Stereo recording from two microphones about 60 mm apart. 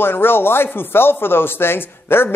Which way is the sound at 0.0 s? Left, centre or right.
Left.